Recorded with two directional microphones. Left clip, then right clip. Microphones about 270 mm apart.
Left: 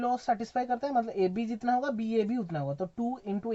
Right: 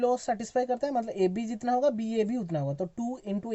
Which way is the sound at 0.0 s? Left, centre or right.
Right.